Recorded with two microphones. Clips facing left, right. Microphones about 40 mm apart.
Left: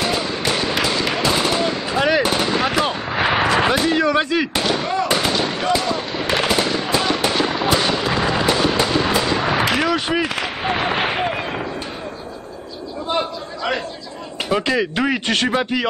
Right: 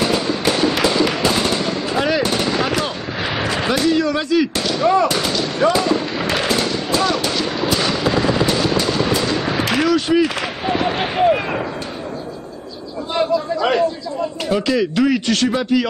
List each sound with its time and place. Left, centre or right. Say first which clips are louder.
0.5 s fireworks: right 4 dB; centre
1.1 s machine gun: even; centre
3.2 s artillery fire: left 5 dB; left
3.7 s speech: even; left
5.0 s fireworks: even; left
6.5 s fireworks: even; left
9.8 s speech: right 4 dB; left
14.5 s speech: even; left